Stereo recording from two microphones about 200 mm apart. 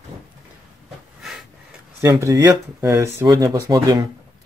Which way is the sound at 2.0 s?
15° right (ahead or behind).